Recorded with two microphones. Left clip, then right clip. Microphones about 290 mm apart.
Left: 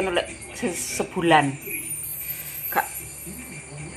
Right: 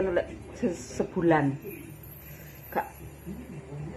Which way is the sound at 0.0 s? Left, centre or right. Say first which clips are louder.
Left 3 dB; centre.